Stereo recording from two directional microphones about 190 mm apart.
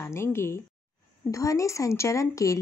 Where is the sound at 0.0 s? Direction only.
15° left (ahead or behind).